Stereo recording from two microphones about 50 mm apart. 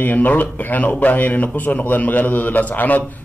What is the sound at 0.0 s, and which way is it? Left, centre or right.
A man's voice, left.